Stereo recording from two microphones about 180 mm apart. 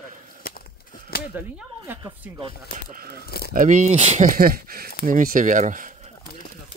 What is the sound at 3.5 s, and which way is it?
Speech, 45° right (ahead or behind).